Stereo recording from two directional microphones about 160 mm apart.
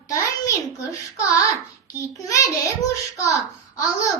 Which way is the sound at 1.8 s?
20° left (ahead or behind).